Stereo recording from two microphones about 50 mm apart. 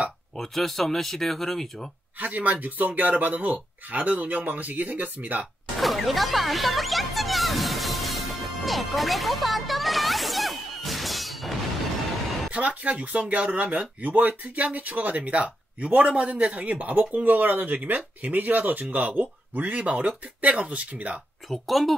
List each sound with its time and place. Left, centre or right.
0.4 s speech: centre
2.1 s speech: right
5.8 s music: centre
12.4 s speech: right
21.5 s speech: centre